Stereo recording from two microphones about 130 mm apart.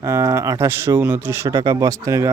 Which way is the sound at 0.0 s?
20° right (ahead or behind).